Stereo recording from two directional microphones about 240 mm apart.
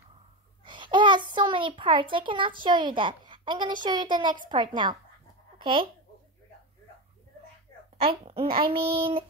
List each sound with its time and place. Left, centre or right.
0.7 s a sound: centre
2.6 s a woman's voice: centre
8.0 s a child's voice: right